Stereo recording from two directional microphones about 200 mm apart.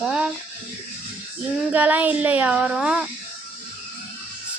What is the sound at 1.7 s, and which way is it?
Speech, 10° right (ahead or behind).